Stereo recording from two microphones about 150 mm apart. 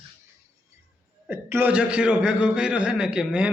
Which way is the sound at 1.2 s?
15° right (ahead or behind).